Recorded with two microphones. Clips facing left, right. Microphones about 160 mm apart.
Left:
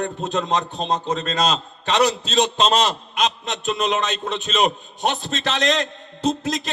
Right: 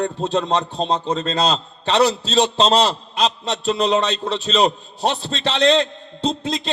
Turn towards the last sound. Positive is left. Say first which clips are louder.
# even
turn(degrees=-30)  # may be behind; listen again after turning